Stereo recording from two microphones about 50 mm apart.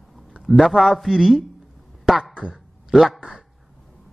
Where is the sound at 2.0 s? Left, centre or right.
Centre.